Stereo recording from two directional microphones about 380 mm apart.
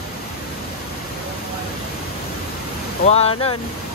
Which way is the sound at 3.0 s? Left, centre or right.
Centre.